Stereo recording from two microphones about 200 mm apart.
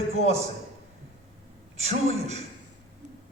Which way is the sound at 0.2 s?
35° right (ahead or behind).